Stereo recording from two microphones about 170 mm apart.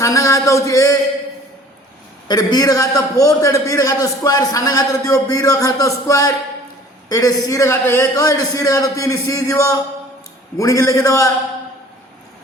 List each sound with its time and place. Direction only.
0.0 s a man's voice: 20° left (ahead or behind)
2.2 s a man's voice: 25° left (ahead or behind)